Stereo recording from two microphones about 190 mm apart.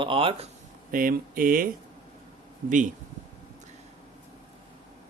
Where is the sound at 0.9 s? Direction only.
45° right (ahead or behind).